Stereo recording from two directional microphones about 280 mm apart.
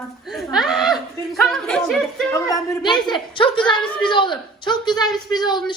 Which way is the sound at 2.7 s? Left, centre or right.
Centre.